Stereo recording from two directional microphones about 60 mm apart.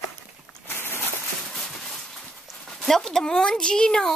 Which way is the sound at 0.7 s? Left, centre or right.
Left.